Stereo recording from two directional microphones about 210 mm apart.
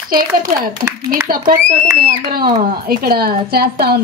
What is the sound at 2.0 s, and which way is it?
A child's voice, 45° right (ahead or behind).